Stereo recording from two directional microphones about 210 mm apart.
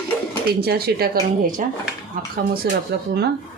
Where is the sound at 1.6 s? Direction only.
35° right (ahead or behind).